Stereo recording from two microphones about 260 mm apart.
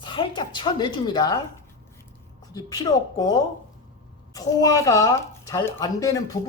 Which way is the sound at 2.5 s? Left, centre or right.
Centre.